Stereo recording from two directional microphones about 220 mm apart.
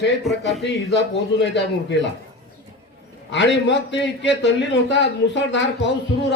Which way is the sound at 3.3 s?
55° left (ahead or behind).